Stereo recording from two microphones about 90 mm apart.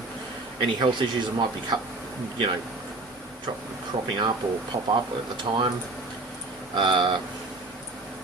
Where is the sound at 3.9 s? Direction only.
75° right (ahead or behind).